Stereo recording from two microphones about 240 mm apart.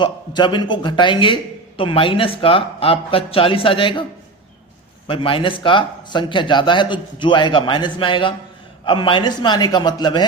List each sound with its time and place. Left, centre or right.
0.0 s a man's voice: centre
5.0 s a man's voice: left